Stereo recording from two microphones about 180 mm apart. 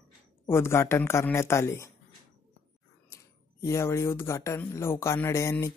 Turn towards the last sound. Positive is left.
turn(degrees=15)  # may be behind; listen again after turning